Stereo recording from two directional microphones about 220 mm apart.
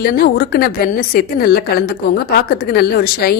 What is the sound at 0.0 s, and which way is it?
A woman's voice, 45° left (ahead or behind).